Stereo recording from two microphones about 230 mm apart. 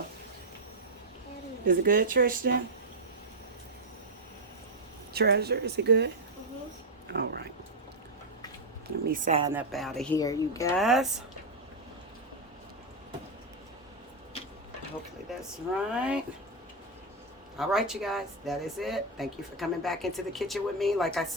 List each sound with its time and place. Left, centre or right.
1.6 s speech: right
5.1 s speech: right
7.1 s speech: right
9.0 s speech: right
9.5 s speech: centre
10.2 s speech: centre
10.8 s speech: centre
15.3 s speech: centre
17.6 s speech: centre